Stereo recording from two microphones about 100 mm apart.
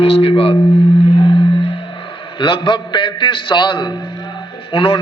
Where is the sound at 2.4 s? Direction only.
55° left (ahead or behind).